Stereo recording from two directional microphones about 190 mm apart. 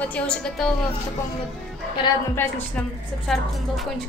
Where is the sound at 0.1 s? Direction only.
5° left (ahead or behind).